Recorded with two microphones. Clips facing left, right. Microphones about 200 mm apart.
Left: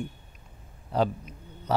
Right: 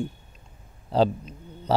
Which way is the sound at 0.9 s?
30° right (ahead or behind).